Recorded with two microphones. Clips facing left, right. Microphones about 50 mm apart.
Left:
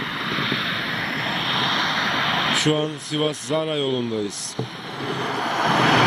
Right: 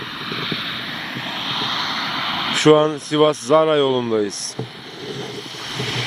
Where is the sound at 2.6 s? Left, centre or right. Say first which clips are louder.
Right 9 dB; right.